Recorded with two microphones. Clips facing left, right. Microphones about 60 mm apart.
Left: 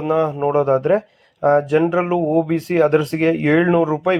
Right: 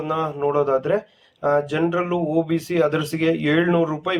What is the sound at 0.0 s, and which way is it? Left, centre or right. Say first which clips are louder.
Speech: left 5 dB; left.